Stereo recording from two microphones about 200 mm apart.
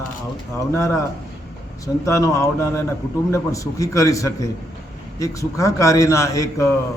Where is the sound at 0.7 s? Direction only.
10° left (ahead or behind).